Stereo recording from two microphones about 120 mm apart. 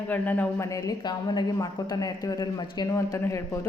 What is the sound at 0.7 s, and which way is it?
A woman's voice, 30° left (ahead or behind).